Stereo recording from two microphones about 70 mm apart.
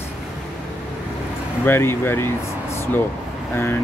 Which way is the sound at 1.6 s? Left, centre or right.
Left.